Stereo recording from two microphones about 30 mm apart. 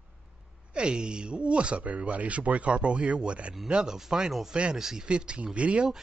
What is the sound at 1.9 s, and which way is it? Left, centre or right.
Speech, right.